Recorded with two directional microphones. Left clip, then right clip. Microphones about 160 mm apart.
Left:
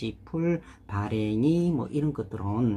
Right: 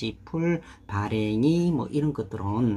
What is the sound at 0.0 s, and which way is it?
Speech, 10° right (ahead or behind).